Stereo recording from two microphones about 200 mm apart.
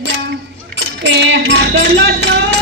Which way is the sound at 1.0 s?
65° right (ahead or behind).